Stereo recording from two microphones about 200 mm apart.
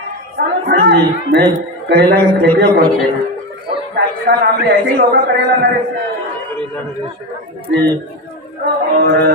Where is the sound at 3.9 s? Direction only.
50° right (ahead or behind).